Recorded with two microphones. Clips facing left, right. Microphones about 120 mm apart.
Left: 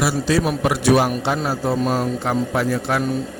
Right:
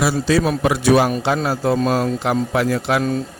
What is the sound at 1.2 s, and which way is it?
Speech, 90° right.